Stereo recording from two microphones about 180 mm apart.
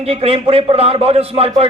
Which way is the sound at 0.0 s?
35° right (ahead or behind).